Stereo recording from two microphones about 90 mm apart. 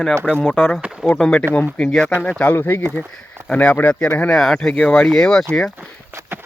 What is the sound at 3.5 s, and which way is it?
Speech, 10° left (ahead or behind).